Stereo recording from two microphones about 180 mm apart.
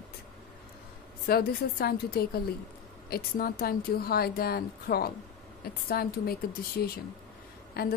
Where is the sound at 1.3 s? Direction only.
60° left (ahead or behind).